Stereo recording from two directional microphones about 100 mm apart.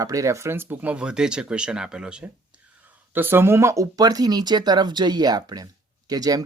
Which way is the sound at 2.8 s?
20° right (ahead or behind).